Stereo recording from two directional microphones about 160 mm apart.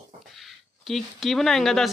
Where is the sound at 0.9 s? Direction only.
Centre (ahead or behind).